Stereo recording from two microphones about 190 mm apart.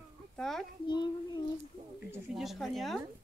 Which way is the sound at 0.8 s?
25° left (ahead or behind).